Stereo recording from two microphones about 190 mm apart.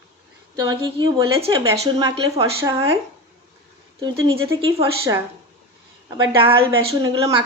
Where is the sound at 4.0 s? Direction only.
25° right (ahead or behind).